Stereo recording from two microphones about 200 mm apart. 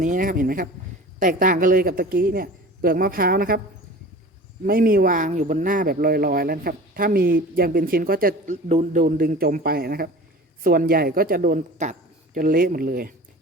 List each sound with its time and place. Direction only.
0.0 s a man's voice: 40° right (ahead or behind)
4.6 s a man's voice: 45° right (ahead or behind)